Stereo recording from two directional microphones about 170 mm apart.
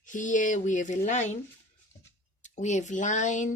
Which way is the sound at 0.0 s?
50° left (ahead or behind).